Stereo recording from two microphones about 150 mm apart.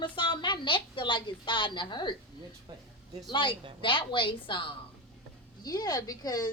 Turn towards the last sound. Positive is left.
turn(degrees=25)  # may be behind; listen again after turning